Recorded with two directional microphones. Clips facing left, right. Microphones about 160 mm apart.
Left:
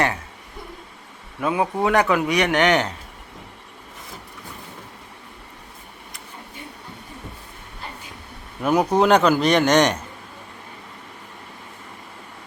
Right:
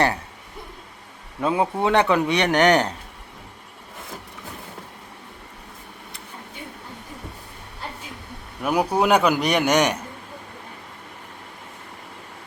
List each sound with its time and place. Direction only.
1.4 s a man's voice: 25° right (ahead or behind)
8.6 s a man's voice: 10° right (ahead or behind)